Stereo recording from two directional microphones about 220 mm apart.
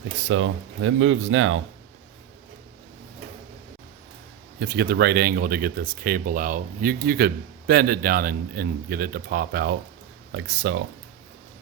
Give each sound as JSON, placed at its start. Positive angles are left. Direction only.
{"t": 0.3, "sound": "speech", "side_deg": -65}
{"t": 4.6, "sound": "speech", "side_deg": -50}
{"t": 10.3, "sound": "speech", "side_deg": -55}